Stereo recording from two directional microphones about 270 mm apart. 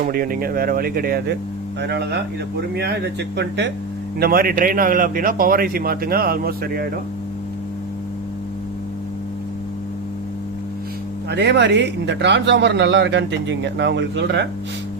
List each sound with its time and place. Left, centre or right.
0.0 s speech: right
11.3 s speech: right